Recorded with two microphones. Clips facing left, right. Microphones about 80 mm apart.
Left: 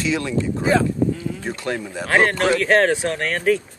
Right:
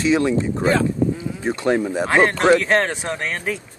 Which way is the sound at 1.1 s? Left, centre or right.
Centre.